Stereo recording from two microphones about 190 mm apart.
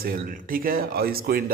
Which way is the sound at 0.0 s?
50° right (ahead or behind).